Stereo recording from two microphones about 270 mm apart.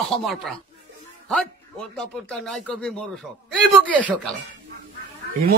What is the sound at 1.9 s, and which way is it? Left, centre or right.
Speech, centre.